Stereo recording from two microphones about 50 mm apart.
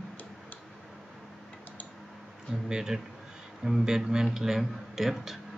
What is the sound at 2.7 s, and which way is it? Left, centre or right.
Speech, centre.